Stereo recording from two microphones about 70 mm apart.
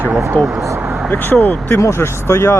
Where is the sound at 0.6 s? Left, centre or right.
Right.